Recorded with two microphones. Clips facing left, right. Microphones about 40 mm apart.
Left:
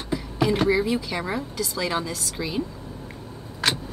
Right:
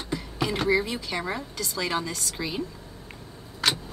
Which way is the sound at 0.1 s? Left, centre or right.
Centre.